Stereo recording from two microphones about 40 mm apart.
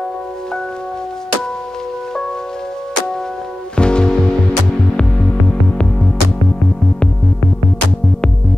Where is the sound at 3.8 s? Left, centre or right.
Left.